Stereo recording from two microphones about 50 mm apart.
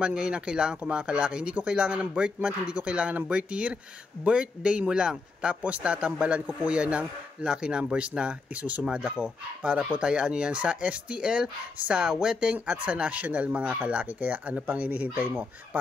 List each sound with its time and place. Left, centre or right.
0.0 s speech: centre
5.6 s speech: right